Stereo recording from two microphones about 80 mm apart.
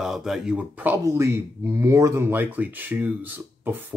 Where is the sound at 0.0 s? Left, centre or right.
Centre.